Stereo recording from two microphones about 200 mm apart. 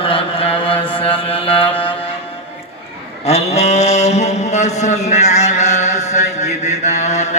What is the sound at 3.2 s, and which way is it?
Mantra, 30° left (ahead or behind).